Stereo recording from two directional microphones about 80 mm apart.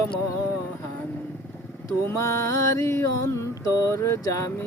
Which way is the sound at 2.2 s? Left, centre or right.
Left.